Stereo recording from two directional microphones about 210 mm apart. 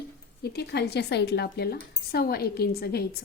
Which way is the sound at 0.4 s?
50° left (ahead or behind).